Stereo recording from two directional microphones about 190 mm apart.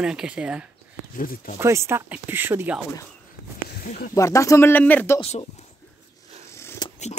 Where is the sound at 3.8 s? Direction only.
50° left (ahead or behind).